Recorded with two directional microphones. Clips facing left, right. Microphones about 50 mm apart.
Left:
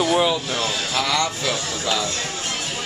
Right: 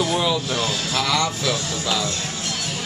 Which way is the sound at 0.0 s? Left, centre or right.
Centre.